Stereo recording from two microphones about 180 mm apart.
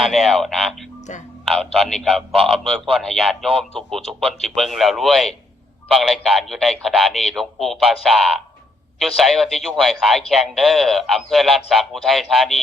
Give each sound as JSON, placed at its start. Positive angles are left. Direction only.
{"t": 0.0, "sound": "a man's voice", "side_deg": 0}